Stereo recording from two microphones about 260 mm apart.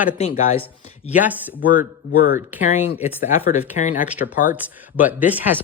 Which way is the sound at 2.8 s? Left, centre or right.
Left.